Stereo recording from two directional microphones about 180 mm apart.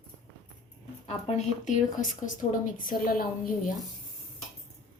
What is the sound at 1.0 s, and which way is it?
Speech, 40° left (ahead or behind).